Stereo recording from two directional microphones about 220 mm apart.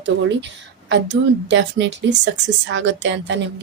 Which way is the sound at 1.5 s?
55° right (ahead or behind).